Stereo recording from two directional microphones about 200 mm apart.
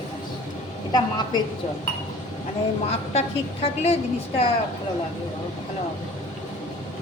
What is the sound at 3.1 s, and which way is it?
Speech, 30° left (ahead or behind).